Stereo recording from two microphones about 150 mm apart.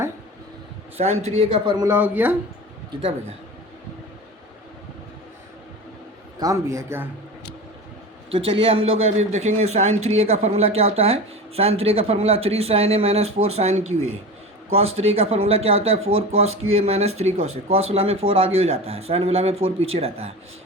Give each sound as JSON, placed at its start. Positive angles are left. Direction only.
{"t": 0.9, "sound": "speech", "side_deg": -45}
{"t": 1.8, "sound": "speech", "side_deg": -15}
{"t": 6.4, "sound": "a man's voice", "side_deg": -20}
{"t": 8.3, "sound": "speech", "side_deg": -40}